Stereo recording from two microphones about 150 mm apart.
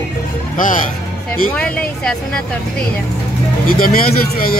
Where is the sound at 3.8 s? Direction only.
75° left (ahead or behind).